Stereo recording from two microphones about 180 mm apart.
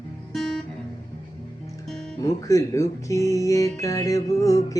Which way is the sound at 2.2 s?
15° left (ahead or behind).